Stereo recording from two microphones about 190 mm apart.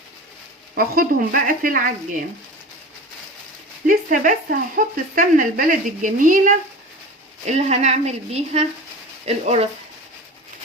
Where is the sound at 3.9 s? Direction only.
45° right (ahead or behind).